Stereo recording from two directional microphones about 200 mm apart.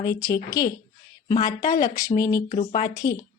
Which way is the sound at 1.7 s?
15° left (ahead or behind).